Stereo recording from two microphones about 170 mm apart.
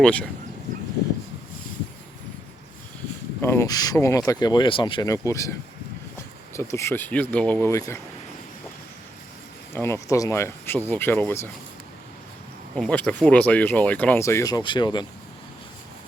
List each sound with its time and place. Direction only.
0.0 s speech: 10° left (ahead or behind)
3.4 s speech: 15° left (ahead or behind)
6.6 s speech: 15° left (ahead or behind)
9.7 s speech: 15° left (ahead or behind)
12.7 s speech: 5° left (ahead or behind); by 15.0 s 25° left (ahead or behind)